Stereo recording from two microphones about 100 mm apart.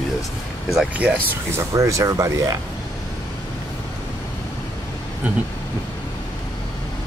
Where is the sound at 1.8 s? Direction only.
35° right (ahead or behind).